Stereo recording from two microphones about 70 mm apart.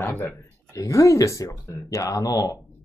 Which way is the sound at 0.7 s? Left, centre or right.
Left.